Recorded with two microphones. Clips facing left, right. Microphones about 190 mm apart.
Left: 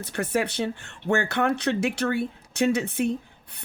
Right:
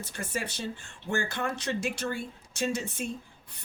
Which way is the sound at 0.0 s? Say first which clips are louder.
Left 9 dB; 65° left (ahead or behind).